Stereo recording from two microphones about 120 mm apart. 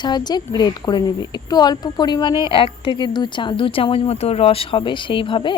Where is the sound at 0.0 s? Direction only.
35° left (ahead or behind).